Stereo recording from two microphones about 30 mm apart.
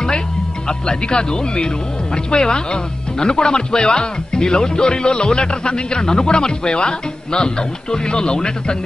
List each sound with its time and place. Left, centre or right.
0.7 s speech: left